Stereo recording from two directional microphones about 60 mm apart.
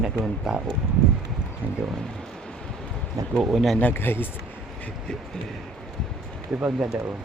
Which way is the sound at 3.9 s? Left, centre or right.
Left.